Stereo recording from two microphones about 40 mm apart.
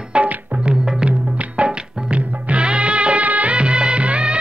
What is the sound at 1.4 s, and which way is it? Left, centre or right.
Music, right.